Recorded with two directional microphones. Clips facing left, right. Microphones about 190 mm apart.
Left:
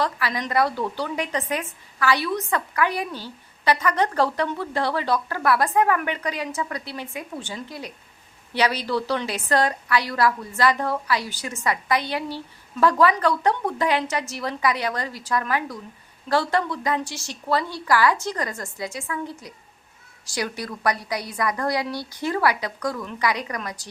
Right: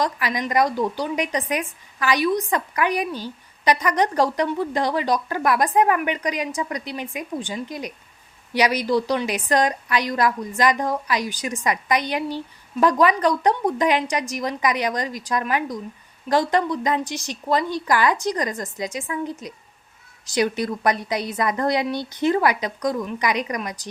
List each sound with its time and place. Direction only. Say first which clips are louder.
0.0 s a woman's voice: right 2 dB; 15° right (ahead or behind)